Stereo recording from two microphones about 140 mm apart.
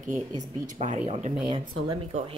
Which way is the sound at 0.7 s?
50° right (ahead or behind).